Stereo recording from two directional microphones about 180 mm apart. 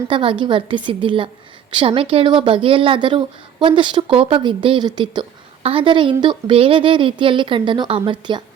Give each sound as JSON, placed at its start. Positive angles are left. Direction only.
{"t": 0.1, "sound": "speech", "side_deg": -30}